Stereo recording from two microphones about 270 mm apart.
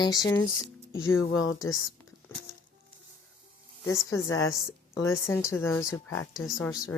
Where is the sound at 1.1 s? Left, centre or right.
Left.